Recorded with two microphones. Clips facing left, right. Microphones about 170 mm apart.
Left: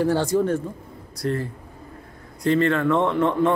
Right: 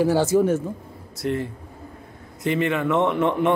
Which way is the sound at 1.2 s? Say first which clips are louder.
Even; 25° right (ahead or behind).